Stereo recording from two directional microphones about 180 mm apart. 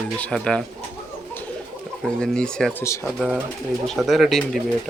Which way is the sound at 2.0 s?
5° left (ahead or behind).